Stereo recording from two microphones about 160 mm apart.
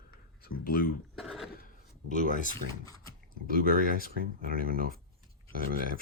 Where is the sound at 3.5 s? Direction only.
60° right (ahead or behind).